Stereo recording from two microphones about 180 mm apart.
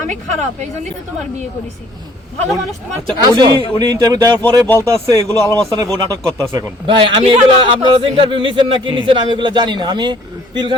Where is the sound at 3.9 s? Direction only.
20° right (ahead or behind).